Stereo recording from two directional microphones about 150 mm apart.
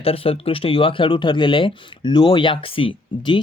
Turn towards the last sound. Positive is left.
turn(degrees=35)  # may be behind; listen again after turning